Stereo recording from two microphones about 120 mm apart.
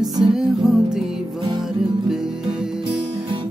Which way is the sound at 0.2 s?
5° right (ahead or behind).